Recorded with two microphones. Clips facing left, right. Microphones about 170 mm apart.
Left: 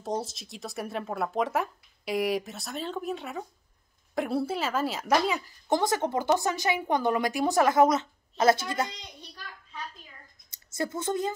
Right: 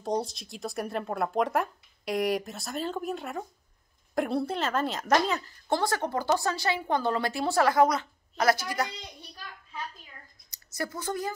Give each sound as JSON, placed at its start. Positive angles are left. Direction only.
{"t": 0.0, "sound": "a woman's voice", "side_deg": 0}
{"t": 10.5, "sound": "a woman's voice", "side_deg": 25}